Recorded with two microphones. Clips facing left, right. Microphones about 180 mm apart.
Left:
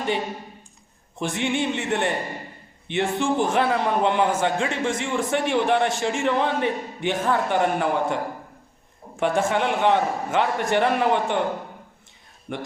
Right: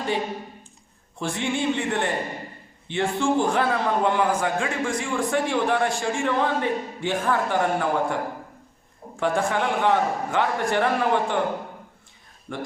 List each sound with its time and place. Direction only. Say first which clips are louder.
1.2 s a man's voice: left 1 dB; 20° left (ahead or behind)
12.5 s a man's voice: left 1 dB; 20° left (ahead or behind)